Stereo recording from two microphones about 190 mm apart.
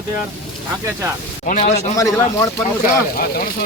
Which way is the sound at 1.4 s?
40° left (ahead or behind).